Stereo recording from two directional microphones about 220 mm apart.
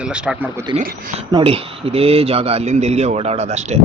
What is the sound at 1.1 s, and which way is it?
A man's voice, 25° right (ahead or behind).